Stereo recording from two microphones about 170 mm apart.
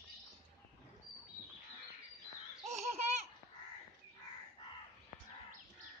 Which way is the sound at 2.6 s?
40° right (ahead or behind).